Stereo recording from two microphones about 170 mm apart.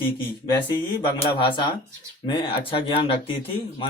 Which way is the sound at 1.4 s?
30° left (ahead or behind).